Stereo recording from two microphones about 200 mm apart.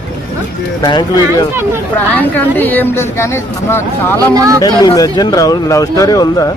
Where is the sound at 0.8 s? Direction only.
20° left (ahead or behind).